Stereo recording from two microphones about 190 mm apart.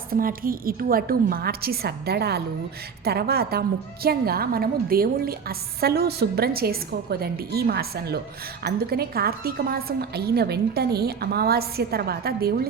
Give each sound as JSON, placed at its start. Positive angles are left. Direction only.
{"t": 0.1, "sound": "a woman's voice", "side_deg": -50}